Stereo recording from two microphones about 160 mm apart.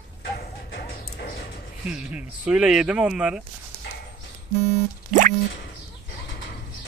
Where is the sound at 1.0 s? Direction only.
75° left (ahead or behind).